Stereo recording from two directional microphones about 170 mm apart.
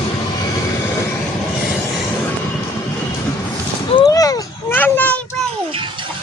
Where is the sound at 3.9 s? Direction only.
25° left (ahead or behind).